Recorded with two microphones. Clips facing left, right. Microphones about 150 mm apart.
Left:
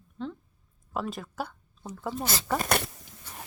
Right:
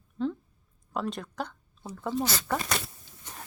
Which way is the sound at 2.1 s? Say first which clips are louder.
Right 7 dB; 15° left (ahead or behind).